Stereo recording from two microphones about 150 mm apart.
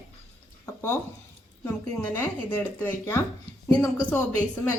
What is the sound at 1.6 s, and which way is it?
A woman's voice, 10° left (ahead or behind).